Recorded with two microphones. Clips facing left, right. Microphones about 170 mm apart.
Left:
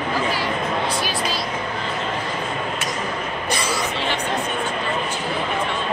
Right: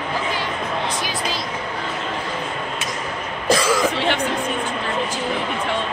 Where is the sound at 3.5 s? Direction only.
90° right.